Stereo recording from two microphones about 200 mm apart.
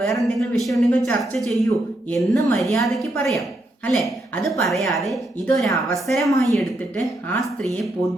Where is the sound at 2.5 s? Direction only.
Centre (ahead or behind).